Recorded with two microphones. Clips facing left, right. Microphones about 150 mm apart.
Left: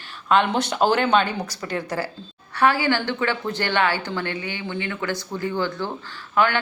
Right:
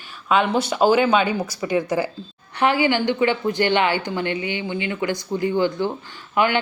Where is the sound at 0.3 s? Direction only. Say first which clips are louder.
Right 1 dB; 5° right (ahead or behind).